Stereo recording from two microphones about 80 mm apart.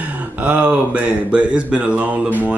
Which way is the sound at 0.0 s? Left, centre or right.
Centre.